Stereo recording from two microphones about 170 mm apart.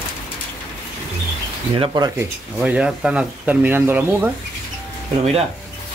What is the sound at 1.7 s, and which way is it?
Speech, 30° right (ahead or behind).